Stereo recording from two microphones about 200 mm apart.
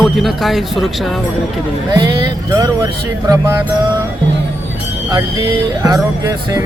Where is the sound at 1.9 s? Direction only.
20° right (ahead or behind).